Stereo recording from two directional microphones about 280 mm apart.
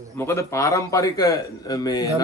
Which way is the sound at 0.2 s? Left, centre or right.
Centre.